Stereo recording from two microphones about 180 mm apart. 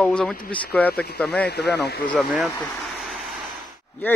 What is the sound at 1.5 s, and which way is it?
Speech, 65° left (ahead or behind).